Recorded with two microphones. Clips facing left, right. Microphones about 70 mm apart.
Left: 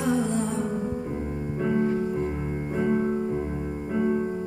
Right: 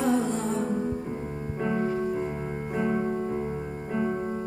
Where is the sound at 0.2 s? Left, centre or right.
Right.